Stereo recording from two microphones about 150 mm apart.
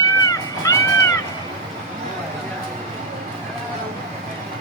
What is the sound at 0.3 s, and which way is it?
Music, 25° left (ahead or behind).